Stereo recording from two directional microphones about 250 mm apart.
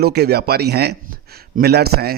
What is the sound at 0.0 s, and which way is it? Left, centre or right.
A man's voice, right.